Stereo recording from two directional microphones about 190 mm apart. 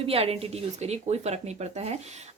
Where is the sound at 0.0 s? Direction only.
30° right (ahead or behind).